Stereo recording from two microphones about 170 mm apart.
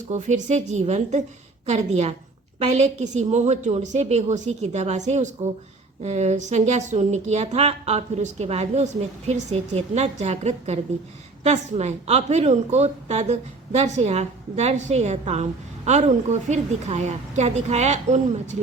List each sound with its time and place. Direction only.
0.1 s a woman's voice: 45° right (ahead or behind)